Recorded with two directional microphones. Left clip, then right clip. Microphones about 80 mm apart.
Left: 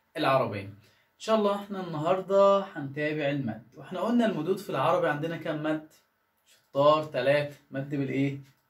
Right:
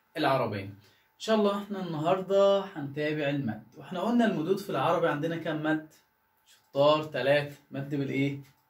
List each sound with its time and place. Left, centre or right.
0.1 s speech: left
3.8 s speech: left
6.7 s speech: left
7.9 s speech: left